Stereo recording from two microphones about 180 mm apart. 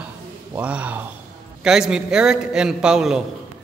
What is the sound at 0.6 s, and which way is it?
Speech, 5° right (ahead or behind).